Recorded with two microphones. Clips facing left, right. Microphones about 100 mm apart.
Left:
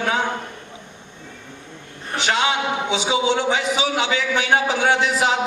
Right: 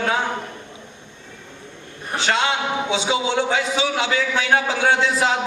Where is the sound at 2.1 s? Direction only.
20° left (ahead or behind).